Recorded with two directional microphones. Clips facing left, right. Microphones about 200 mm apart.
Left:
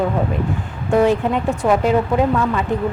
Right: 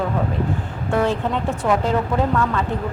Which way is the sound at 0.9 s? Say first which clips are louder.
Left 5 dB; 15° left (ahead or behind).